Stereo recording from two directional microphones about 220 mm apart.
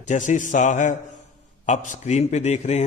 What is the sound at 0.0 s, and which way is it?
A man's voice, 35° left (ahead or behind).